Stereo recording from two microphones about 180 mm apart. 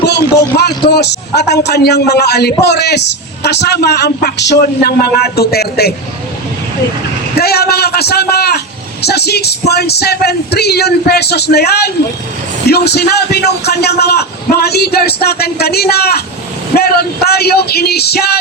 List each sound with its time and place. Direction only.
0.6 s a man's voice: 65° left (ahead or behind)
7.3 s a man's voice: 60° left (ahead or behind)